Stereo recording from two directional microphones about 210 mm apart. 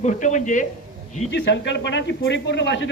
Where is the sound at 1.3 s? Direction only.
60° left (ahead or behind).